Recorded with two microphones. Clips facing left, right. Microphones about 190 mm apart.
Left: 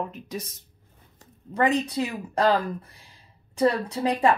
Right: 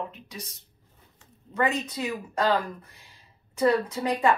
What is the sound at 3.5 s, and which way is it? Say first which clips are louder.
Speech: even; 35° left (ahead or behind).